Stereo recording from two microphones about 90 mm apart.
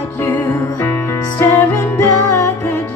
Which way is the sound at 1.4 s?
30° left (ahead or behind).